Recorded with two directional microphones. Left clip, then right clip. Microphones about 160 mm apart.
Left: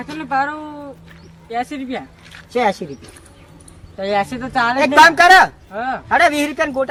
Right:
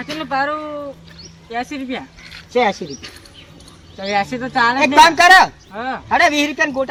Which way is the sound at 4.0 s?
65° left (ahead or behind).